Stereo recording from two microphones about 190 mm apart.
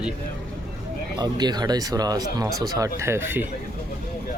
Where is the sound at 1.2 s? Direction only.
20° right (ahead or behind).